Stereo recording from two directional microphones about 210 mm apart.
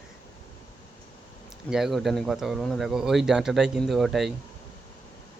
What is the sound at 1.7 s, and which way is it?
Speech, centre (ahead or behind).